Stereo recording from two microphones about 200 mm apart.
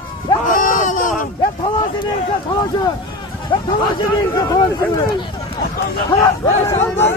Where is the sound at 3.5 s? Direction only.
25° left (ahead or behind).